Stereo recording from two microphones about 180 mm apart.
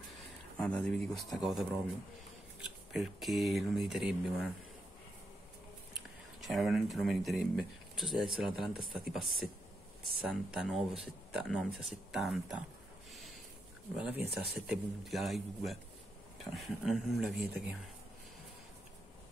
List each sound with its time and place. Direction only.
0.6 s speech: 5° left (ahead or behind)
2.9 s speech: centre (ahead or behind)
6.4 s speech: centre (ahead or behind)
13.9 s speech: 5° right (ahead or behind)